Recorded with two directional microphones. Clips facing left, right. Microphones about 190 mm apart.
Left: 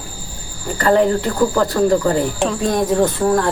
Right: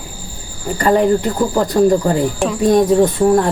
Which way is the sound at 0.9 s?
15° right (ahead or behind).